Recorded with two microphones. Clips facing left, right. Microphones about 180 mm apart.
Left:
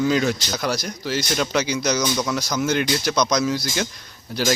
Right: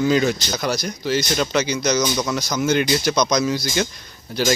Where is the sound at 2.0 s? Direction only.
5° right (ahead or behind).